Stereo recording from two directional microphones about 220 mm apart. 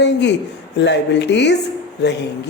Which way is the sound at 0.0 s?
50° left (ahead or behind).